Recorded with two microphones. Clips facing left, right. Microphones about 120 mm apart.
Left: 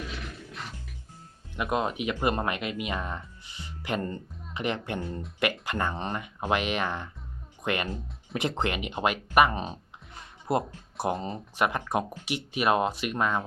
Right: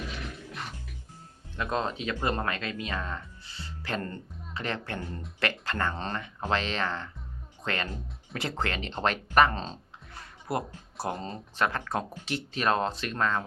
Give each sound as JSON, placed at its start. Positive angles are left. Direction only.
{"t": 1.5, "sound": "a woman's voice", "side_deg": 15}